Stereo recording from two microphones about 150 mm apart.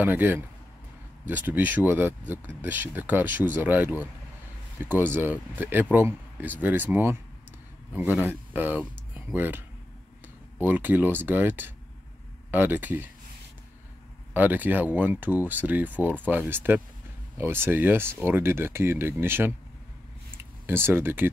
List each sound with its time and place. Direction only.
0.0 s speech: 15° right (ahead or behind)
14.3 s speech: 10° right (ahead or behind)
20.6 s speech: 15° right (ahead or behind)